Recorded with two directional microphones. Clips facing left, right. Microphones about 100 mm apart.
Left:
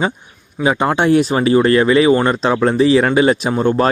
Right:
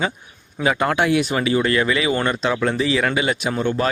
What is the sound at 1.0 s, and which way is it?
Speech, 35° left (ahead or behind).